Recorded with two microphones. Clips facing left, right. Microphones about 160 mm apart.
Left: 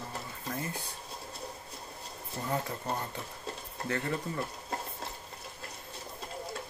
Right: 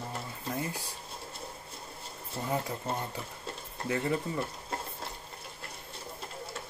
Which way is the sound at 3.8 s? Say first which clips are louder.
Right 3 dB; 15° right (ahead or behind).